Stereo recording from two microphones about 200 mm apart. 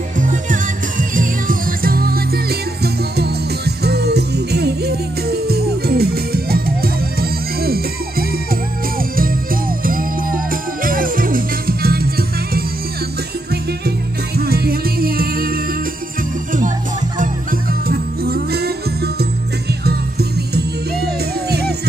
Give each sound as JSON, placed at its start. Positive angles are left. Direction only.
{"t": 0.2, "sound": "music", "side_deg": -40}
{"t": 17.2, "sound": "music", "side_deg": -45}